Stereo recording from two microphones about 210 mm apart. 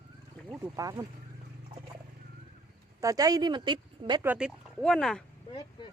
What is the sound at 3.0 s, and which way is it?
Speech, 15° right (ahead or behind).